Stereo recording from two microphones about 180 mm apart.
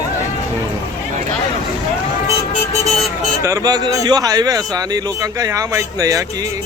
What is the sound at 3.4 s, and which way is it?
Speech, 20° right (ahead or behind).